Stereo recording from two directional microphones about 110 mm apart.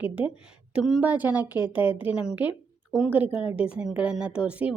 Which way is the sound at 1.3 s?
40° left (ahead or behind).